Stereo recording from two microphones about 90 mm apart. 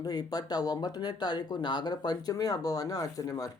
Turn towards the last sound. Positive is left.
turn(degrees=40)  # may be behind; listen again after turning